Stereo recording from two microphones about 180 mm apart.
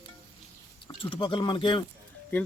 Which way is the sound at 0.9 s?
30° left (ahead or behind).